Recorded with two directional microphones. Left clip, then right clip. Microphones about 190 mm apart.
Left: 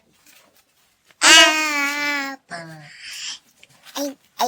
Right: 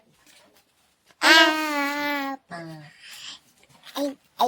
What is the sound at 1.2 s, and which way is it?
Babbling, 20° right (ahead or behind).